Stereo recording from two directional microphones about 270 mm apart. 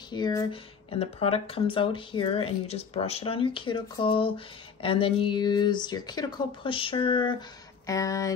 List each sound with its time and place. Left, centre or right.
0.1 s speech: centre